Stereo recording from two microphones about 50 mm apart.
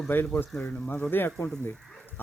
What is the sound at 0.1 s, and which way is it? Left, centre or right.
Speech, left.